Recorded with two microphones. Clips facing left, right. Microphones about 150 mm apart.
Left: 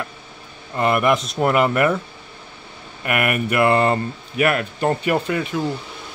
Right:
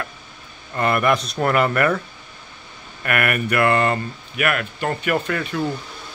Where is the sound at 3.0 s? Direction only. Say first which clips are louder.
Left 1 dB; 15° left (ahead or behind).